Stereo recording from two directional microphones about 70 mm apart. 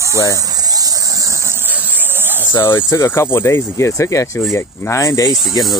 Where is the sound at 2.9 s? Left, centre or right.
Left.